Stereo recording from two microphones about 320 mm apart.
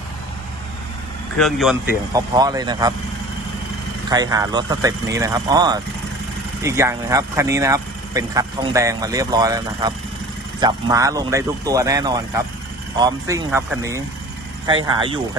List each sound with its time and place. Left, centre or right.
1.4 s speech: centre
2.1 s speech: centre
4.1 s speech: centre